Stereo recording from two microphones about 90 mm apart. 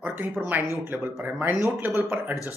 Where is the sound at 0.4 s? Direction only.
20° right (ahead or behind).